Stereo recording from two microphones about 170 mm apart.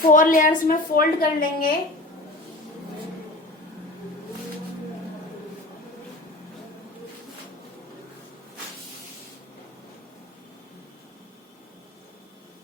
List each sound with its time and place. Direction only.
0.0 s a woman's voice: 55° left (ahead or behind)